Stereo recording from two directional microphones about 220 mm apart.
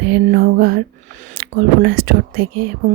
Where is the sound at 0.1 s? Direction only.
45° right (ahead or behind).